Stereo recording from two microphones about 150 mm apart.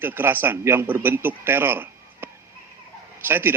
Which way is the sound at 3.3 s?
15° right (ahead or behind).